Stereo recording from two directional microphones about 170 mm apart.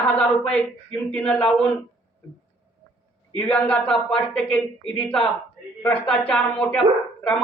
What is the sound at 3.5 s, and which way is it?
A man's voice, 5° left (ahead or behind).